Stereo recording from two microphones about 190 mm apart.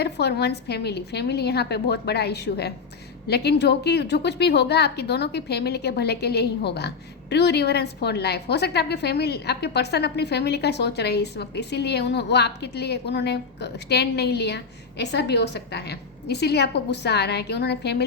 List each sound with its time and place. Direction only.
0.0 s a woman's voice: 60° left (ahead or behind)